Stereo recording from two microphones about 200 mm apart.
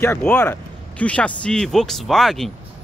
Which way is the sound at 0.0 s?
10° left (ahead or behind).